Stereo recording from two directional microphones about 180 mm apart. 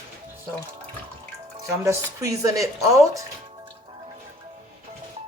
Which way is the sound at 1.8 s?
15° right (ahead or behind).